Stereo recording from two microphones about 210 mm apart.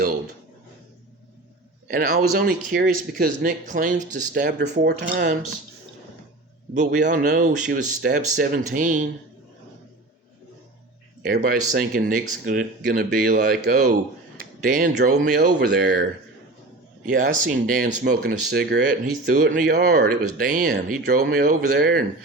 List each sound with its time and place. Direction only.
1.9 s speech: 40° right (ahead or behind)
4.8 s speech: 50° right (ahead or behind)
7.1 s speech: 40° right (ahead or behind)
11.2 s speech: 45° right (ahead or behind)
17.1 s speech: 40° right (ahead or behind)